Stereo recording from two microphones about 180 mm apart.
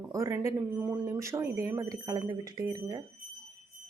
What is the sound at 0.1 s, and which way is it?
Speech, 15° right (ahead or behind).